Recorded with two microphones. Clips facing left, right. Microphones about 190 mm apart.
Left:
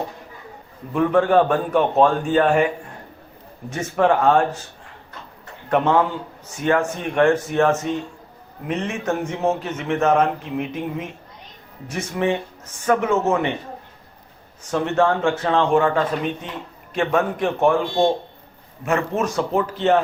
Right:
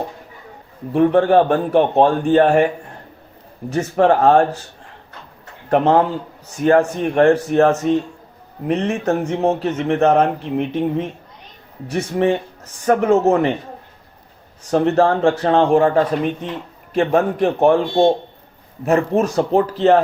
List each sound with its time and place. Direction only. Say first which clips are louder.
0.9 s speech: right 3 dB; 35° right (ahead or behind)
5.6 s speech: right 4 dB; 35° right (ahead or behind)
14.7 s speech: right 4 dB; 35° right (ahead or behind)
18.9 s speech: right 5 dB; 35° right (ahead or behind)